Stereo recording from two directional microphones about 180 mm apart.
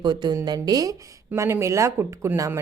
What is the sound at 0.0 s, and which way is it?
Speech, 25° right (ahead or behind).